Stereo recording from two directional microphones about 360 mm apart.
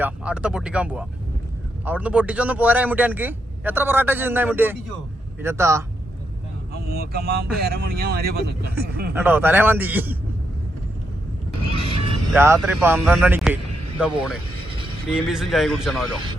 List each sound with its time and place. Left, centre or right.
0.0 s a man's voice: centre
6.8 s speech: right
9.1 s speech: centre
12.3 s speech: centre